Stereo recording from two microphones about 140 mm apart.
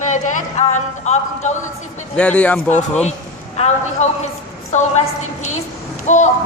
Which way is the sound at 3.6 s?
55° left (ahead or behind).